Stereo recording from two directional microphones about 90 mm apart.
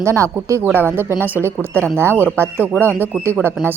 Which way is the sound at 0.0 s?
35° right (ahead or behind).